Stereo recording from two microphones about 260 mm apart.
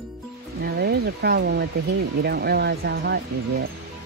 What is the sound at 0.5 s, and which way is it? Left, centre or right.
Speech, right.